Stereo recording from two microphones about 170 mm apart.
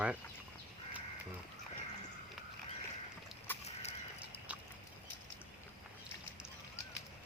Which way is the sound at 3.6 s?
40° left (ahead or behind).